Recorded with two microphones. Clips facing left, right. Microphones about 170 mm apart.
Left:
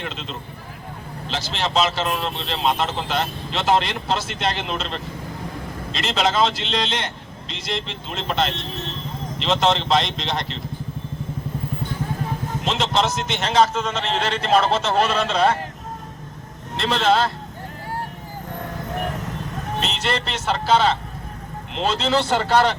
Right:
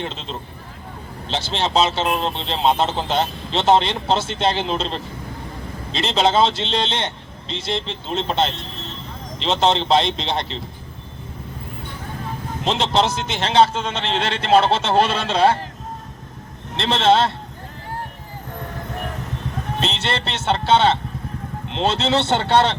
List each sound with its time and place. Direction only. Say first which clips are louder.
0.0 s speech: right 2 dB; 30° right (ahead or behind)
12.6 s speech: right 3 dB; 30° right (ahead or behind)
16.7 s speech: right 2 dB; 30° right (ahead or behind)
19.8 s speech: right 1 dB; 30° right (ahead or behind)